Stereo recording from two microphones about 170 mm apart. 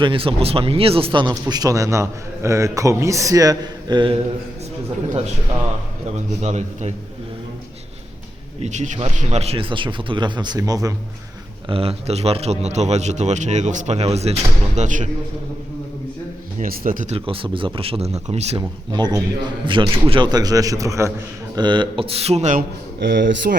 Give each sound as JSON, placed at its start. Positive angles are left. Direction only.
{"t": 0.0, "sound": "speech", "side_deg": -30}
{"t": 6.4, "sound": "a man's voice", "side_deg": -40}
{"t": 8.6, "sound": "speech", "side_deg": -40}
{"t": 11.7, "sound": "a man's voice", "side_deg": -35}
{"t": 16.6, "sound": "a man's voice", "side_deg": -55}
{"t": 17.2, "sound": "a man's voice", "side_deg": -30}
{"t": 18.9, "sound": "a man's voice", "side_deg": -25}
{"t": 23.0, "sound": "speech", "side_deg": -80}